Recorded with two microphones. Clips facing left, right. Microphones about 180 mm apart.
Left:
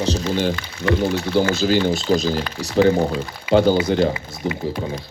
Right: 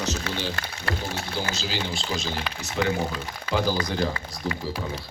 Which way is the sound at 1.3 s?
55° left (ahead or behind).